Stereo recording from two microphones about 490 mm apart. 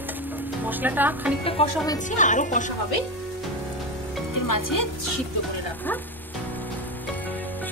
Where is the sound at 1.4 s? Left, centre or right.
Centre.